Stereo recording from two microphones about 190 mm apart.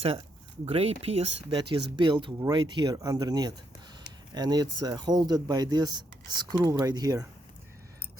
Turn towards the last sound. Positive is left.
turn(degrees=-20)  # may be behind; listen again after turning